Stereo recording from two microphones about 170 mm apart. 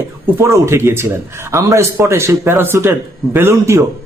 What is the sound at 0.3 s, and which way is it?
Speech, 15° right (ahead or behind).